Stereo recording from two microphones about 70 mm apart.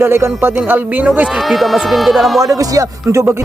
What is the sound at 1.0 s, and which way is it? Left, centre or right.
Speech, centre.